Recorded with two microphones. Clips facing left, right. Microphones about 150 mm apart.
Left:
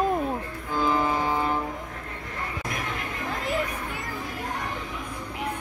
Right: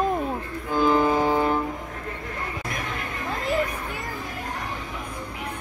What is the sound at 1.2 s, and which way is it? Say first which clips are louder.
Music: right 5 dB; 60° right (ahead or behind).